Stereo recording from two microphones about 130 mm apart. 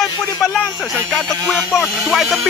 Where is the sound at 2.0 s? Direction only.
5° right (ahead or behind).